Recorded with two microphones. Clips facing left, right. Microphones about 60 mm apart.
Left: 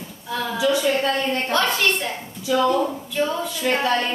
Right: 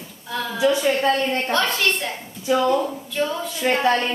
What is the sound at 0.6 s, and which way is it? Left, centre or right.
Speech, right.